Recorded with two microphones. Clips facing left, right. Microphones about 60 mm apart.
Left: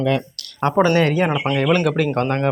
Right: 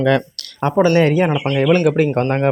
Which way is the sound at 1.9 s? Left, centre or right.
Centre.